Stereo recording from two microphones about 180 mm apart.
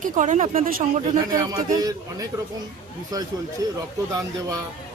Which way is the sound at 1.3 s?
20° right (ahead or behind).